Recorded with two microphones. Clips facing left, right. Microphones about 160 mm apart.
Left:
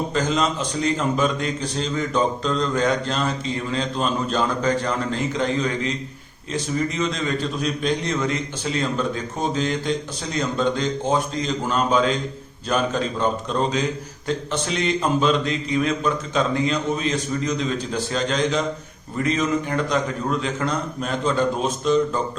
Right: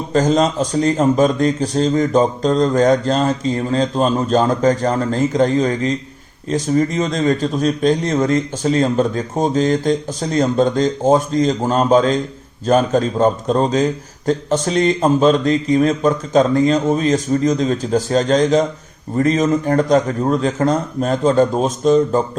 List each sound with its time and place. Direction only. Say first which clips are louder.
0.1 s a man's voice: right 7 dB; 40° right (ahead or behind)